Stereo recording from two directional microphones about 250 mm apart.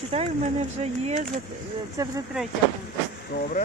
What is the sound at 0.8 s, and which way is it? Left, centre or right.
Speech, right.